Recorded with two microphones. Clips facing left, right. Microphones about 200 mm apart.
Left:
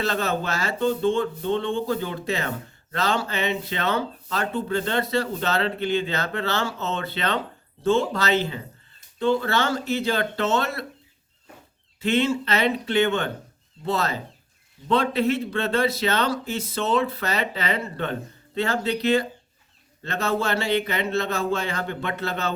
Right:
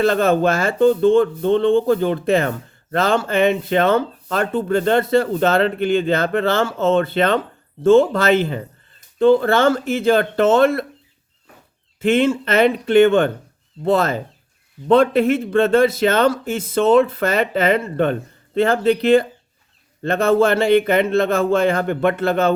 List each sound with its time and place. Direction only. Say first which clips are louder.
0.0 s speech: right 10 dB; 50° right (ahead or behind)
12.0 s speech: right 6 dB; 50° right (ahead or behind)